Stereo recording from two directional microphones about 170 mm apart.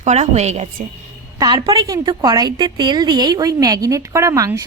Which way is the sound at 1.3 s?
25° right (ahead or behind).